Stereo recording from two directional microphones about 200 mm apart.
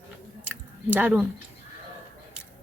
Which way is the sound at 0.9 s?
10° right (ahead or behind).